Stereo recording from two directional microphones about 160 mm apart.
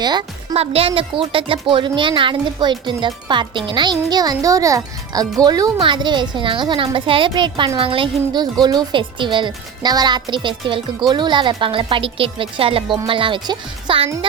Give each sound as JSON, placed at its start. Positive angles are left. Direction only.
{"t": 0.0, "sound": "a child's voice", "side_deg": -25}
{"t": 0.5, "sound": "a woman's voice", "side_deg": -40}